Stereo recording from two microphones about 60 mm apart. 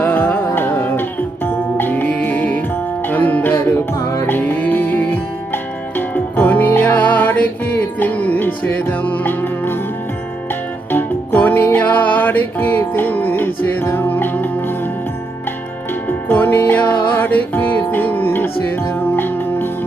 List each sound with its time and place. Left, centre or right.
0.0 s music: left
10.9 s music: left
16.0 s music: left